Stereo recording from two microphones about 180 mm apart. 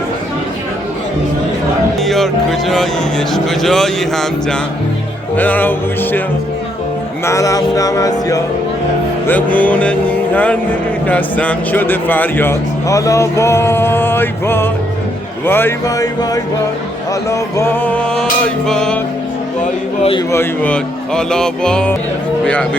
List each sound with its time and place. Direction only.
2.0 s speech: centre (ahead or behind)
7.3 s speech: 15° left (ahead or behind)
9.2 s speech: 10° left (ahead or behind)
20.0 s a man's voice: 30° left (ahead or behind)
20.3 s speech: 10° left (ahead or behind)